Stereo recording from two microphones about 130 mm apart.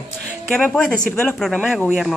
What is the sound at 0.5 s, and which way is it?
A woman's voice, 5° left (ahead or behind).